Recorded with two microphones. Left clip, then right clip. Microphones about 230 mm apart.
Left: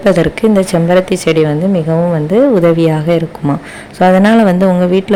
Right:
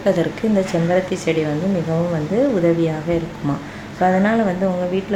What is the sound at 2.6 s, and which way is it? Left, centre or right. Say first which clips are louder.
A woman's voice: left 8 dB; left.